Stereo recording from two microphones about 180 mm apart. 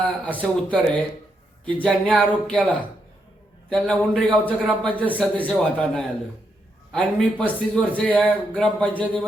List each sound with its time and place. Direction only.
0.3 s a man's voice: 10° left (ahead or behind)